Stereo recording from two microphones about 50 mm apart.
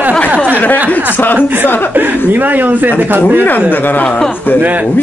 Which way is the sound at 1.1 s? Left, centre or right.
Left.